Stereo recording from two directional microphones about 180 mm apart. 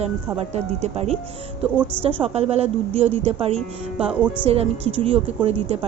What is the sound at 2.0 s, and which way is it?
A woman's voice, 30° right (ahead or behind).